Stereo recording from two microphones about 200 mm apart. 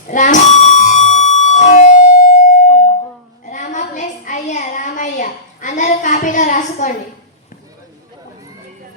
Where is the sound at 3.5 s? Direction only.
40° left (ahead or behind).